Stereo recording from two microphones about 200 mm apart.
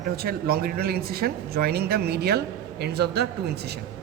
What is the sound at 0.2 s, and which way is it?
Speech, 50° right (ahead or behind).